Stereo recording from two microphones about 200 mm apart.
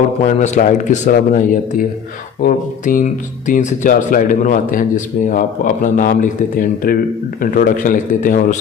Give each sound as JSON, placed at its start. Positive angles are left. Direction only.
{"t": 0.3, "sound": "speech", "side_deg": 35}